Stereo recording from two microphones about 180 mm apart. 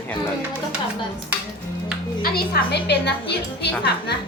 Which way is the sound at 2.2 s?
60° left (ahead or behind).